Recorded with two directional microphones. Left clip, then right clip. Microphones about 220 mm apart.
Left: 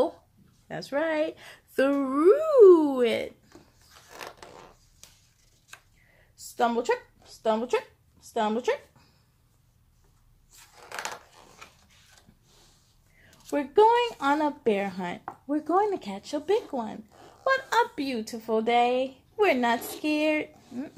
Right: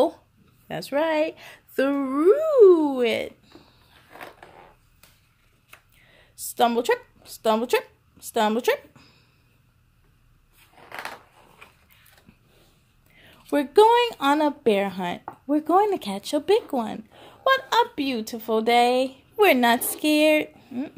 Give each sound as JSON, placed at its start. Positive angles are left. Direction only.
{"t": 0.7, "sound": "a woman's voice", "side_deg": -20}
{"t": 6.1, "sound": "a sound", "side_deg": -25}
{"t": 7.4, "sound": "speech", "side_deg": -35}
{"t": 13.2, "sound": "speech", "side_deg": -30}